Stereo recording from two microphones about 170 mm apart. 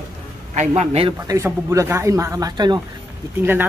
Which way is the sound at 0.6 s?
40° right (ahead or behind).